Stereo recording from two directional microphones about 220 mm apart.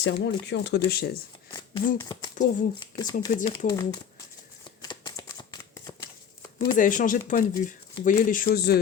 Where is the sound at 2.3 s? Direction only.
35° left (ahead or behind).